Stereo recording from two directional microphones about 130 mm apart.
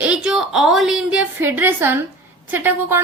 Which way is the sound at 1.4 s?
15° right (ahead or behind).